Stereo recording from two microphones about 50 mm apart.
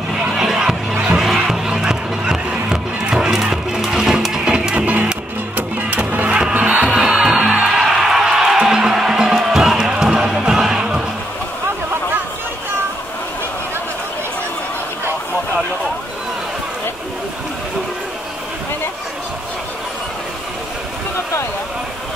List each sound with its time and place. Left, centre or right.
0.4 s a sound: centre
1.1 s music: centre
1.4 s music: centre
6.2 s music: right
6.9 s music: centre